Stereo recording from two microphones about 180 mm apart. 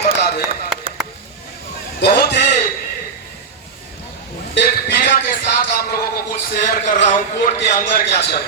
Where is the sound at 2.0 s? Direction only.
65° left (ahead or behind).